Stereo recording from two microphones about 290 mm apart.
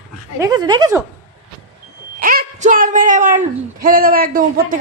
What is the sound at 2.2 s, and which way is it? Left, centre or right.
A woman's voice, right.